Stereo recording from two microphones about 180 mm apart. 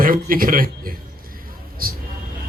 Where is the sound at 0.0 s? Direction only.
50° right (ahead or behind).